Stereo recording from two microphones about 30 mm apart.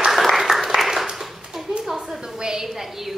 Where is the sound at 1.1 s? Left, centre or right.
Centre.